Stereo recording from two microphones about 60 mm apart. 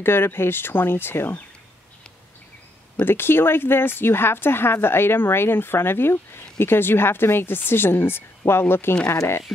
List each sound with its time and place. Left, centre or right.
0.0 s speech: left
3.1 s speech: left